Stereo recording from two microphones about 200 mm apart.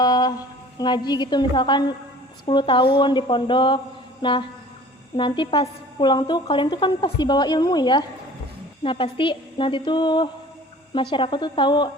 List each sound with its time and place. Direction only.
0.0 s a woman's voice: 20° left (ahead or behind)
4.2 s mantra: 25° left (ahead or behind)
5.1 s a woman's voice: 25° left (ahead or behind)